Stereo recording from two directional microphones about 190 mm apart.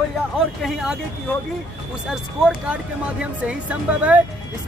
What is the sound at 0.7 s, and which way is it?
Speech, centre (ahead or behind).